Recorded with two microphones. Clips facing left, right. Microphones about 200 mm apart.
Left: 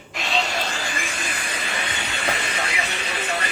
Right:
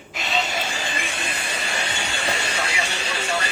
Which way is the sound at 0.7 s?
20° right (ahead or behind).